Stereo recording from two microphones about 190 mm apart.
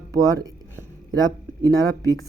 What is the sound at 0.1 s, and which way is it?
Speech, 20° right (ahead or behind).